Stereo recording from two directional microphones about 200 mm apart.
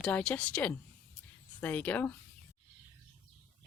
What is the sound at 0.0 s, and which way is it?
Speech, 5° left (ahead or behind).